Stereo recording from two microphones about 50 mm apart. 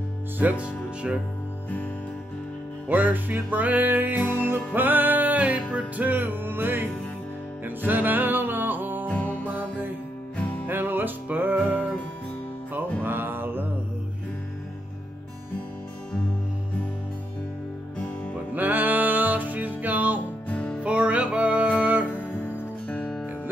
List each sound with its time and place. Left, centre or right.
0.4 s music: right
2.9 s music: right
9.2 s music: left
9.5 s music: right
13.0 s mantra: right
18.5 s music: right
20.4 s music: left
20.8 s music: right
22.2 s music: left